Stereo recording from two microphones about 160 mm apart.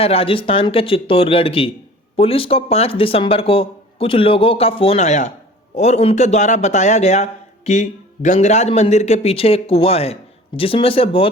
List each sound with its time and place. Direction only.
0.0 s a man's voice: 35° left (ahead or behind)